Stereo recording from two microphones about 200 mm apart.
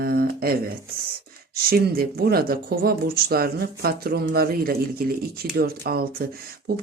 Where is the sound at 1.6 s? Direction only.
50° right (ahead or behind).